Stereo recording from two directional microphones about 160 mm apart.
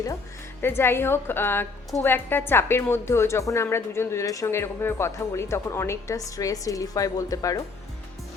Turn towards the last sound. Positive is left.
turn(degrees=20)  # may be behind; listen again after turning